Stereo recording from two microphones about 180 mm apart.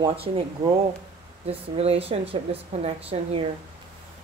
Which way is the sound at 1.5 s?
35° right (ahead or behind).